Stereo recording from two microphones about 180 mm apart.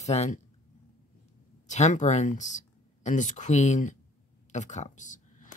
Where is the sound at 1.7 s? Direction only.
40° left (ahead or behind).